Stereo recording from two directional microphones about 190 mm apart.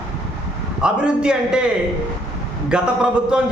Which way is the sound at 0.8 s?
5° right (ahead or behind).